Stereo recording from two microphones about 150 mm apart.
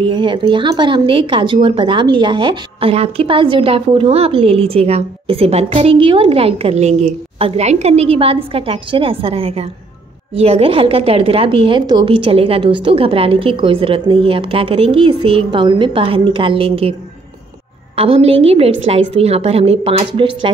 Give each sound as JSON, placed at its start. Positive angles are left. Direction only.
{"t": 0.0, "sound": "a woman's voice", "side_deg": -35}
{"t": 17.9, "sound": "a woman's voice", "side_deg": -40}